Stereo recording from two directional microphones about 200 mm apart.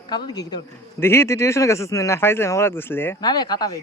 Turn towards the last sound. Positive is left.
turn(degrees=20)  # may be behind; listen again after turning